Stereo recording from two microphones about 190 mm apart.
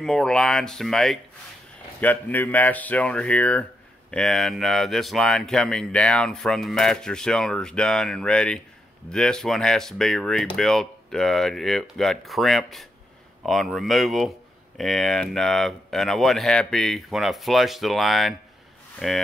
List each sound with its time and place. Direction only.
0.0 s speech: 5° left (ahead or behind)